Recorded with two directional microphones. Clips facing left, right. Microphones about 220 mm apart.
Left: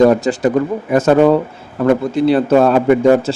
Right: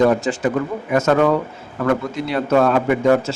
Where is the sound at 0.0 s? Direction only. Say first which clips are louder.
Left 5 dB; 40° left (ahead or behind).